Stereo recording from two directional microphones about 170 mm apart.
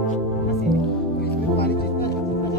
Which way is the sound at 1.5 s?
70° left (ahead or behind).